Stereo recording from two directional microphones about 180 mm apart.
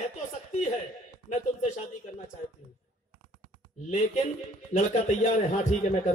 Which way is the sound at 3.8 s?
40° left (ahead or behind).